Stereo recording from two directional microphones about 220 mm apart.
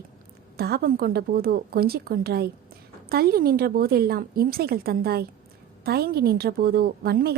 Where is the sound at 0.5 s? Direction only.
45° right (ahead or behind).